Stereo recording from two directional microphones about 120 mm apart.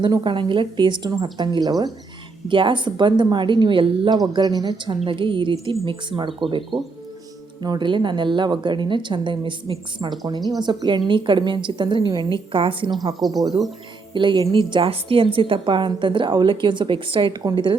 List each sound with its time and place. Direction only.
0.0 s a woman's voice: 40° right (ahead or behind)
2.5 s a woman's voice: 45° right (ahead or behind)
4.2 s a woman's voice: 35° right (ahead or behind)
5.0 s a woman's voice: 45° right (ahead or behind)
13.3 s a woman's voice: 30° right (ahead or behind)
14.1 s a woman's voice: 40° right (ahead or behind)